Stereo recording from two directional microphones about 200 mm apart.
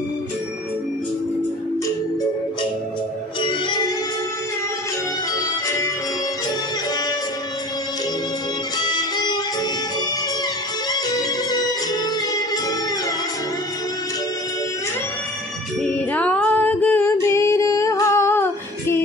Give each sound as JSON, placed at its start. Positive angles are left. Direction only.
{"t": 3.4, "sound": "music", "side_deg": 25}
{"t": 8.7, "sound": "music", "side_deg": 20}
{"t": 10.9, "sound": "music", "side_deg": 20}
{"t": 15.8, "sound": "music", "side_deg": 5}